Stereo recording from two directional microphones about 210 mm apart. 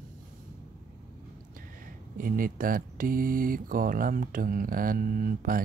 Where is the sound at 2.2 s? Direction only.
40° right (ahead or behind).